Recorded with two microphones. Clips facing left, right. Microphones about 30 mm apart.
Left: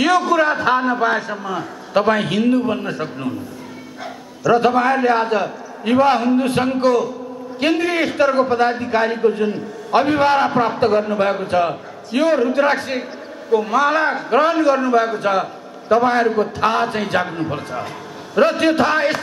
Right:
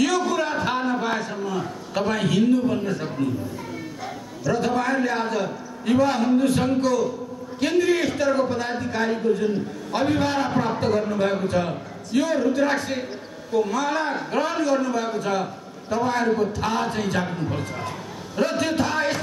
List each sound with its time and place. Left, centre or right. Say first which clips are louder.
0.3 s a sound: left 8 dB; left
1.3 s a man's voice: left 3 dB; left
4.5 s a man's voice: left 8 dB; left
18.5 s a man's voice: left 7 dB; left